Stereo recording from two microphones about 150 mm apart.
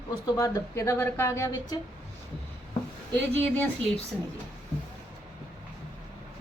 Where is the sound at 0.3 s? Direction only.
20° left (ahead or behind).